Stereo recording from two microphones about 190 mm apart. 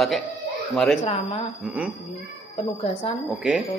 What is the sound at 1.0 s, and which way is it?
Speech, 30° left (ahead or behind).